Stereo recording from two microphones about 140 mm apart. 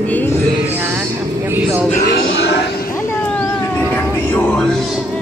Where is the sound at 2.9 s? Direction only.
15° left (ahead or behind).